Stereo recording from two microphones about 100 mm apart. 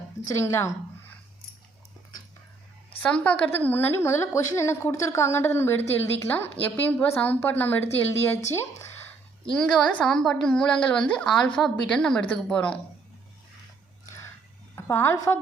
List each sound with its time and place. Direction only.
0.3 s a woman's voice: 30° left (ahead or behind)
3.0 s a woman's voice: 15° left (ahead or behind)
9.5 s a woman's voice: 5° left (ahead or behind)
14.8 s a woman's voice: 25° left (ahead or behind)